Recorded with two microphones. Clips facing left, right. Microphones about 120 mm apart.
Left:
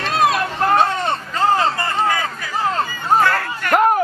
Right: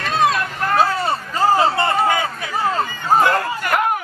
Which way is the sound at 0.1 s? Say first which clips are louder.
Left 1 dB; 5° left (ahead or behind).